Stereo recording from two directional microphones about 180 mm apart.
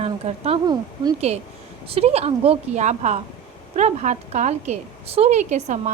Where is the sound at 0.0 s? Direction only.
35° right (ahead or behind).